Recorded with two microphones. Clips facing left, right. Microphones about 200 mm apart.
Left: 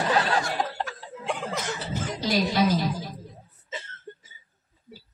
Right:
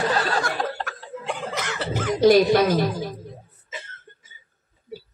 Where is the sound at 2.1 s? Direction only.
55° right (ahead or behind).